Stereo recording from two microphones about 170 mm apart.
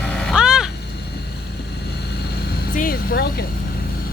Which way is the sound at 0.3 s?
5° right (ahead or behind).